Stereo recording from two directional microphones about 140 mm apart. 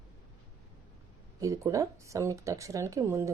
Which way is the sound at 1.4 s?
20° right (ahead or behind).